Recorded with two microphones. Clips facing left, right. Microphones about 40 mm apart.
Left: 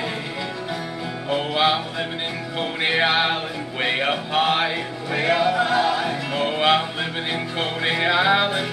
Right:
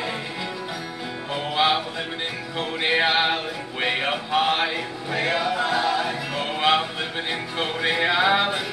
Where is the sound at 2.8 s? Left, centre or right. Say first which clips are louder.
Left 1 dB; centre.